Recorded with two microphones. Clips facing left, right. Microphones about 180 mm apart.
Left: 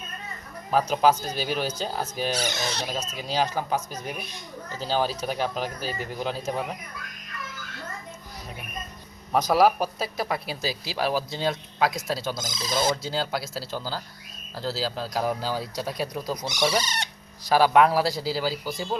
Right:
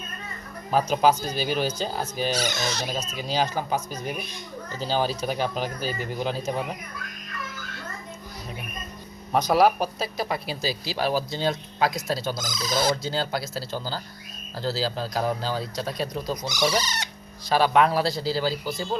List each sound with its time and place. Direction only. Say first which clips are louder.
0.7 s speech: even; centre (ahead or behind)
2.4 s speech: right 1 dB; 30° left (ahead or behind)
3.2 s speech: even; centre (ahead or behind)
9.3 s speech: even; centre (ahead or behind)
12.4 s speech: right 1 dB; 25° left (ahead or behind)
13.0 s speech: right 1 dB; 5° left (ahead or behind)
16.5 s speech: even; 25° left (ahead or behind)
17.5 s speech: left 1 dB; 10° left (ahead or behind)